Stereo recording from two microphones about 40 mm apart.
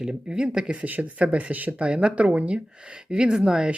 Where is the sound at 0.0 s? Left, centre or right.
Right.